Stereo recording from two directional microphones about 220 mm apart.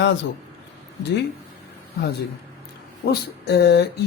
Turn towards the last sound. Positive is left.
turn(degrees=50)  # may be behind; listen again after turning